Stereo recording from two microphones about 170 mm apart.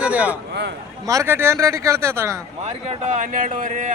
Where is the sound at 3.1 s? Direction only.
50° right (ahead or behind).